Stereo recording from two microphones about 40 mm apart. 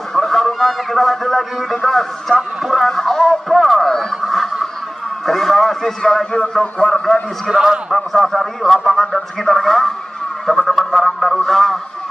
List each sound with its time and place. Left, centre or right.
0.1 s speech: centre
7.5 s a man's voice: centre
7.9 s a man's voice: centre
10.4 s music: centre
11.4 s a sound: centre